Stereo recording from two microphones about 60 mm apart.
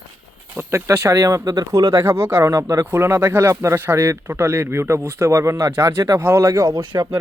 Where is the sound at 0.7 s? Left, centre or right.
Right.